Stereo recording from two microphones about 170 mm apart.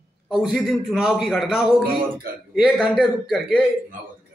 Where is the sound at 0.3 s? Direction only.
Centre (ahead or behind).